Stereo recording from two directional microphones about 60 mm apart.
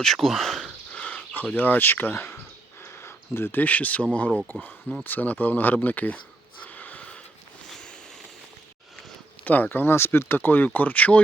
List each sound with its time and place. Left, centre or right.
0.0 s speech: centre
0.9 s speech: left
4.5 s speech: left
6.7 s a sound: left
9.4 s speech: left